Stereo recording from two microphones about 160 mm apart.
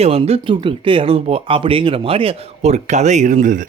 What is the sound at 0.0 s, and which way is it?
Speech, 40° right (ahead or behind).